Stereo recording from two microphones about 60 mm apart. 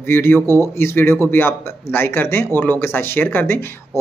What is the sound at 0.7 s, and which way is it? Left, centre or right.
Speech, left.